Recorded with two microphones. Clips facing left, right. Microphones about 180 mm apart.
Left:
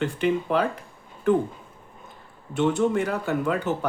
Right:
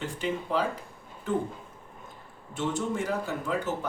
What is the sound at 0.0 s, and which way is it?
Speech, 60° left (ahead or behind).